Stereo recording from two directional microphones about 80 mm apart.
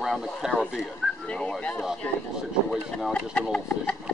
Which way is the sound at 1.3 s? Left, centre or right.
Centre.